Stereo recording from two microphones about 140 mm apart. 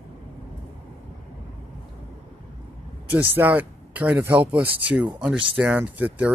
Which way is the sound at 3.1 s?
10° right (ahead or behind).